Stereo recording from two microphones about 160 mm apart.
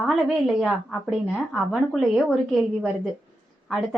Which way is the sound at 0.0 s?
Centre (ahead or behind).